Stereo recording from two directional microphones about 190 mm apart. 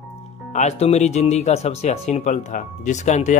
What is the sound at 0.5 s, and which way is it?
Speech, 35° left (ahead or behind).